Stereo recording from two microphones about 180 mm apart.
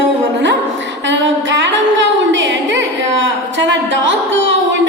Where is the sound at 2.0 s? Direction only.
90° right.